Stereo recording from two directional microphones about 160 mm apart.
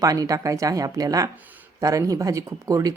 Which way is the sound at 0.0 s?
20° right (ahead or behind).